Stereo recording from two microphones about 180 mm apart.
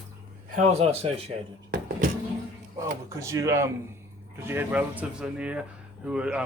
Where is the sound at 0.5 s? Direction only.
40° right (ahead or behind).